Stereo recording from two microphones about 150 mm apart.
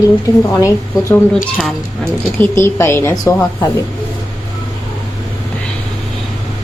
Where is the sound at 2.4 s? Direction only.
15° left (ahead or behind).